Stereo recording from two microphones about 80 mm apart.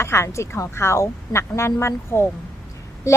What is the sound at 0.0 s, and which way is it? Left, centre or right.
A woman's voice, left.